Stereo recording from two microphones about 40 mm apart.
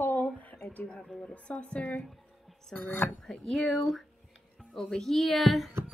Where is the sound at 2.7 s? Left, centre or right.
Left.